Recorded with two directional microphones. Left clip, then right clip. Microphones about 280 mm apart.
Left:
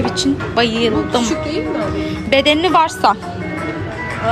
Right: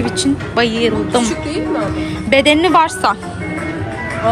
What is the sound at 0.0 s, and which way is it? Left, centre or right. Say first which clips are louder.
Speech: even; centre.